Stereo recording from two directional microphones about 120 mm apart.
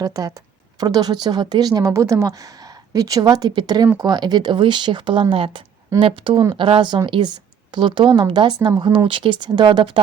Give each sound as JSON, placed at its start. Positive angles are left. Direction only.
{"t": 0.0, "sound": "speech", "side_deg": -30}